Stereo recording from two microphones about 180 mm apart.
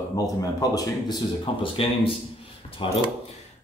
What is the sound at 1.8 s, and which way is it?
Speech, 30° left (ahead or behind).